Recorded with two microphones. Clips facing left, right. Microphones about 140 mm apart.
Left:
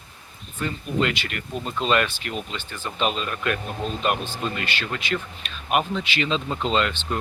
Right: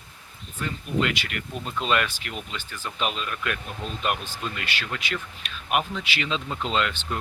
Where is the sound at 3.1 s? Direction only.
35° left (ahead or behind).